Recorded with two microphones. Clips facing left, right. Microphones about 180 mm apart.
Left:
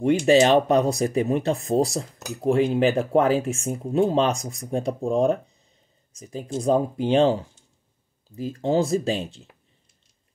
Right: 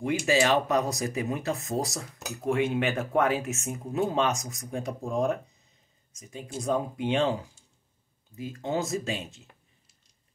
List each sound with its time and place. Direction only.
0.3 s speech: 35° left (ahead or behind)